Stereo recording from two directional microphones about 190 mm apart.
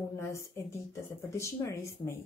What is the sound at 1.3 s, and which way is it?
Speech, 15° left (ahead or behind).